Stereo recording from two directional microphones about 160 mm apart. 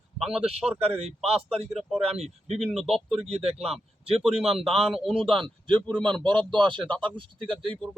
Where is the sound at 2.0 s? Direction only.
40° right (ahead or behind).